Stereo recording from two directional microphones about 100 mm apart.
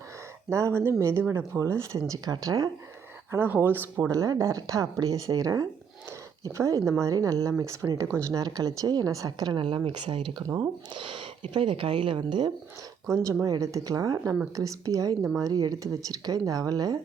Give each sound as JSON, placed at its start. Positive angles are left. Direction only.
{"t": 0.5, "sound": "a woman's voice", "side_deg": -25}
{"t": 3.3, "sound": "speech", "side_deg": -20}
{"t": 4.1, "sound": "a woman's voice", "side_deg": -35}
{"t": 13.1, "sound": "a woman's voice", "side_deg": -35}